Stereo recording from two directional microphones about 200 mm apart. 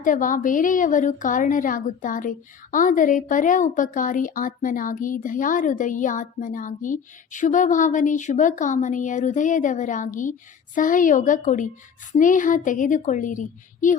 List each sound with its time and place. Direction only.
0.0 s a woman's voice: 40° left (ahead or behind)